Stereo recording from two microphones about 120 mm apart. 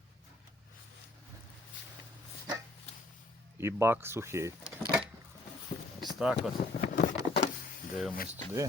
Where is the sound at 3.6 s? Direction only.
20° right (ahead or behind).